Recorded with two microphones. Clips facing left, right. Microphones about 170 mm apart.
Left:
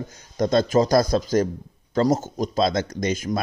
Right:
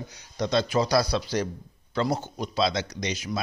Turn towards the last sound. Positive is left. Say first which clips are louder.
# left 6 dB
turn(degrees=50)  # may be behind; listen again after turning